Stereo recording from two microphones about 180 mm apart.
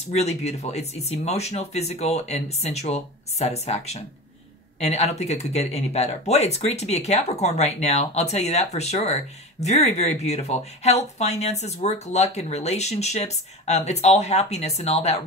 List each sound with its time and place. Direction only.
0.1 s speech: 35° left (ahead or behind)